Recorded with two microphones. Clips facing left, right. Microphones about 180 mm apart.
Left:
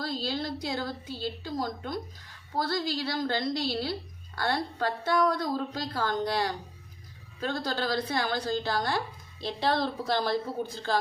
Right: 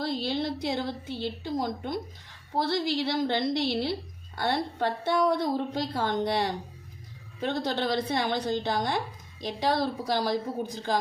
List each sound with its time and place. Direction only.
0.0 s a woman's voice: 25° right (ahead or behind)